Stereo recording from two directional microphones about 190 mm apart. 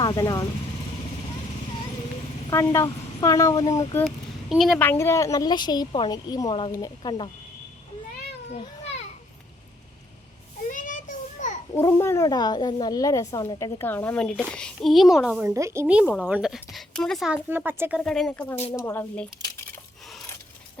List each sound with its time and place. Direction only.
0.0 s speech: 20° left (ahead or behind)
2.5 s speech: 15° left (ahead or behind)
4.0 s a woman's voice: centre (ahead or behind); by 7.3 s 25° left (ahead or behind)
10.7 s a sound: 45° left (ahead or behind)
11.7 s speech: 15° left (ahead or behind); by 15.4 s 5° right (ahead or behind)
15.4 s speech: 15° right (ahead or behind)
16.0 s speech: 5° left (ahead or behind)
18.0 s speech: centre (ahead or behind)